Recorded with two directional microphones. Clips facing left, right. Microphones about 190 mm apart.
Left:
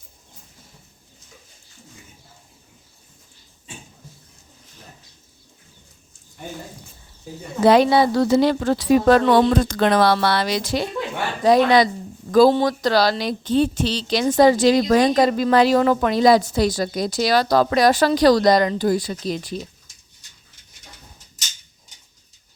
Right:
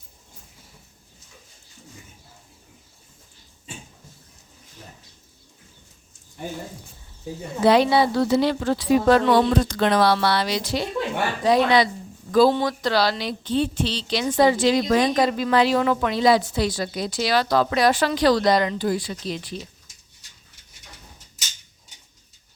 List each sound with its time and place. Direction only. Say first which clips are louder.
7.6 s a woman's voice: left 3 dB; 45° left (ahead or behind)